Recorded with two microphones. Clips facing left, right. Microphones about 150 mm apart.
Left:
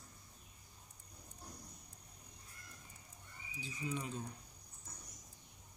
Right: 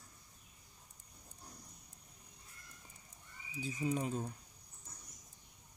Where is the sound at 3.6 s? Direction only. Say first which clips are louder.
Right 6 dB; 45° right (ahead or behind).